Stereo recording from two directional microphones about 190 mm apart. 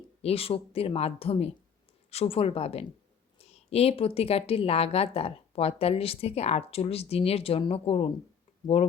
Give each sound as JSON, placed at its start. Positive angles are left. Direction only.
{"t": 0.2, "sound": "a woman's voice", "side_deg": 30}